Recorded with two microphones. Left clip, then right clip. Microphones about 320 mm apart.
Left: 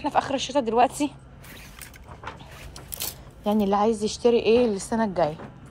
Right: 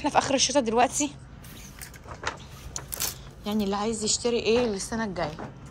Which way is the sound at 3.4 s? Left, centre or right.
Centre.